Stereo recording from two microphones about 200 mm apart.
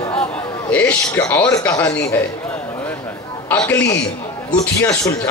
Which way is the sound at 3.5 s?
10° left (ahead or behind).